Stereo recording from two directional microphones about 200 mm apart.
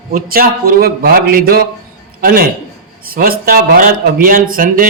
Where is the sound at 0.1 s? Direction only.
45° right (ahead or behind).